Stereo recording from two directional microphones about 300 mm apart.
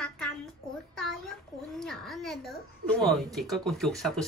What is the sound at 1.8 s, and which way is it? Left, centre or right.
A woman's voice, centre.